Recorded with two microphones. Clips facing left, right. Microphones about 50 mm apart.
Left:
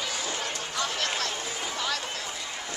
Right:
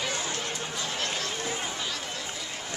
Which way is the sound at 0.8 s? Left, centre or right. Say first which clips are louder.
Left 4 dB; left.